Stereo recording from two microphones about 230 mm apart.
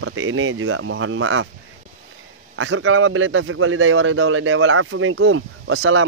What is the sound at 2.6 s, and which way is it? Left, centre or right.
A man's voice, right.